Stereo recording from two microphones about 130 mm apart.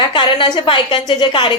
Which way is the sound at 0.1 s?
40° left (ahead or behind).